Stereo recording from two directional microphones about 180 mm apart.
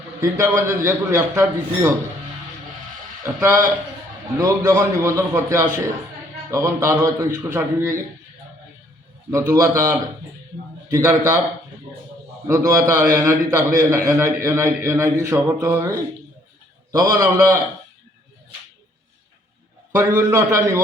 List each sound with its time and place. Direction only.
0.2 s a man's voice: 15° right (ahead or behind)
3.4 s a man's voice: 15° right (ahead or behind)
9.3 s a man's voice: 15° right (ahead or behind)
12.5 s a man's voice: 15° right (ahead or behind)
19.9 s a man's voice: 15° right (ahead or behind)